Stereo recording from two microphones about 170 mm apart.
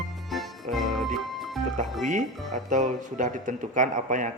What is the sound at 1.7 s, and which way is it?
Speech, 45° right (ahead or behind).